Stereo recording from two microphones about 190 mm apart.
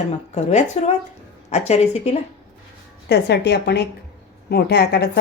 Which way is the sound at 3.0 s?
65° left (ahead or behind).